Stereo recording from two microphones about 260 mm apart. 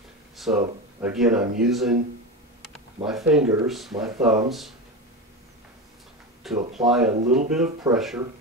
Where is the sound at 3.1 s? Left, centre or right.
Centre.